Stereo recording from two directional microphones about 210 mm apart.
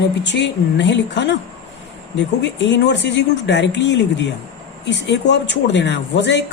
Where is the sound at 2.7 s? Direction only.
55° left (ahead or behind).